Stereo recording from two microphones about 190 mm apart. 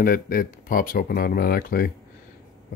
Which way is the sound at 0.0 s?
45° left (ahead or behind).